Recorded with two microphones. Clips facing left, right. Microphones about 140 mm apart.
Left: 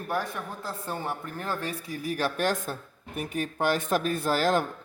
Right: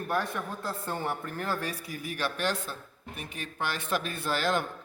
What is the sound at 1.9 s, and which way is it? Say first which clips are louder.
Speech: left 7 dB; 40° left (ahead or behind).